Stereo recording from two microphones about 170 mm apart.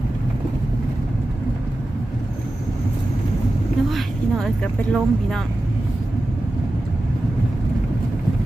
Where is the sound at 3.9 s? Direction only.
Centre (ahead or behind).